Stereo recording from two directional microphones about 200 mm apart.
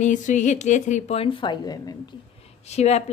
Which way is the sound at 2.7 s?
35° left (ahead or behind).